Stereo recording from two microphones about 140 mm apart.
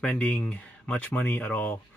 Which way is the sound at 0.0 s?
10° left (ahead or behind).